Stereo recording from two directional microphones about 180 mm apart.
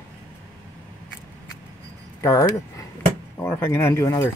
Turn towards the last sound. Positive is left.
turn(degrees=15)  # may be behind; listen again after turning